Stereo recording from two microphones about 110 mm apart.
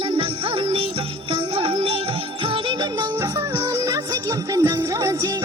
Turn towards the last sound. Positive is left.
turn(degrees=-30)  # may be behind; listen again after turning